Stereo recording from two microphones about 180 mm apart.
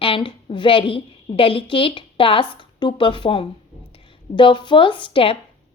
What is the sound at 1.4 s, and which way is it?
Speech, 30° left (ahead or behind).